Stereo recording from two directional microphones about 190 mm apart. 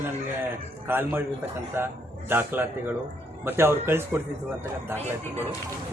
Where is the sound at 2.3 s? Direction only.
10° right (ahead or behind).